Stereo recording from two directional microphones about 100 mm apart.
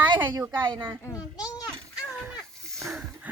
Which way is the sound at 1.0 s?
35° left (ahead or behind).